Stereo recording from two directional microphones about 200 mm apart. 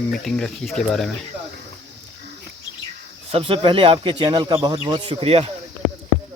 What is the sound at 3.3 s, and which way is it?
Speech, 25° right (ahead or behind).